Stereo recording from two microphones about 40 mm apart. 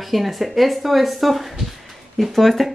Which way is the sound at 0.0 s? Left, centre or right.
Centre.